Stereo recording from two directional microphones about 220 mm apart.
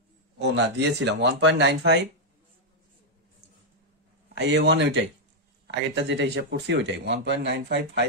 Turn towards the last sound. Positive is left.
turn(degrees=-50)  # may be behind; listen again after turning